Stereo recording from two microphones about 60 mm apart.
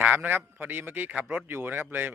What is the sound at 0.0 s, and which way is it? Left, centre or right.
A man's voice, right.